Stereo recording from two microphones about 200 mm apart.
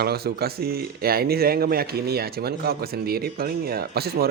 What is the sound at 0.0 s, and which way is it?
Speech, 55° right (ahead or behind).